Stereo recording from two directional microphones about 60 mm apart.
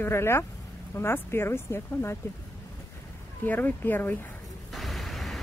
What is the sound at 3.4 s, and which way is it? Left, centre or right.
Speech, left.